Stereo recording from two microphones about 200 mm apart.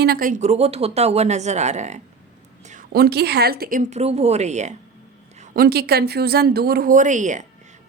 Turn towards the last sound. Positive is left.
turn(degrees=-40)  # may be behind; listen again after turning